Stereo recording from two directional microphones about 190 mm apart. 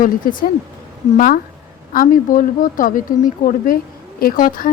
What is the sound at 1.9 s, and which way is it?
Speech, 45° left (ahead or behind).